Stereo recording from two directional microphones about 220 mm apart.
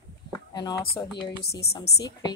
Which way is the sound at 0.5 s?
15° left (ahead or behind).